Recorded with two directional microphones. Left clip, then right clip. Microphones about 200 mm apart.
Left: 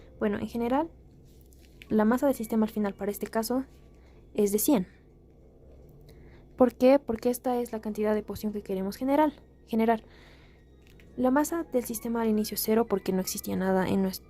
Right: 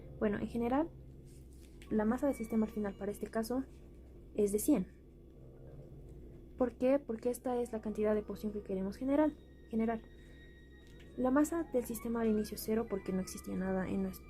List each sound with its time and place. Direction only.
0.2 s a woman's voice: 30° left (ahead or behind)
1.9 s a woman's voice: 55° left (ahead or behind); by 4.8 s 40° left (ahead or behind)
6.6 s a woman's voice: 40° left (ahead or behind)
11.2 s a woman's voice: 35° left (ahead or behind); by 14.2 s 55° left (ahead or behind)